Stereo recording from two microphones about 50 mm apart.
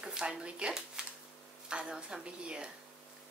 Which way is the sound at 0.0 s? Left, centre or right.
Centre.